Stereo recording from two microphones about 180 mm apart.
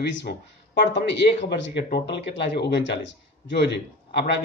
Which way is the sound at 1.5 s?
65° left (ahead or behind).